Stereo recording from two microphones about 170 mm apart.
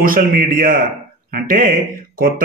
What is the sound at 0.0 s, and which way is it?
A man's voice, 55° right (ahead or behind).